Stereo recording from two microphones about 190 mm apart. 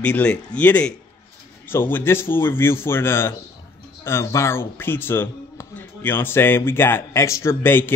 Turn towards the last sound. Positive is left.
turn(degrees=10)  # may be behind; listen again after turning